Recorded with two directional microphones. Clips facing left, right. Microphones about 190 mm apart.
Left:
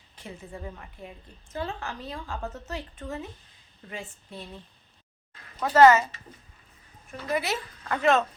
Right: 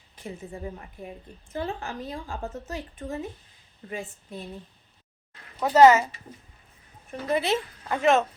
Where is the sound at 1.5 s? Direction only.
20° right (ahead or behind).